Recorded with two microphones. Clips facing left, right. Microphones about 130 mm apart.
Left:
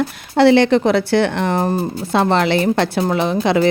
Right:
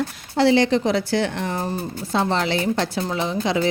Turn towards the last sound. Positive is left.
turn(degrees=65)  # may be behind; listen again after turning